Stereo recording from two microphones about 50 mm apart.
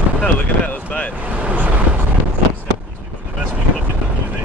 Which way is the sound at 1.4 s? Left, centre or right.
Right.